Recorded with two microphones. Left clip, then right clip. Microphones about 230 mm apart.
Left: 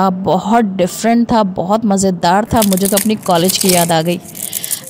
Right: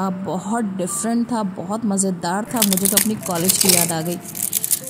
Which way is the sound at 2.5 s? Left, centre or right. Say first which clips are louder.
Left 7 dB; centre.